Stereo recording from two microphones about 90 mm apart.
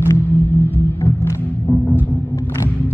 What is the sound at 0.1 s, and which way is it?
Music, 25° left (ahead or behind).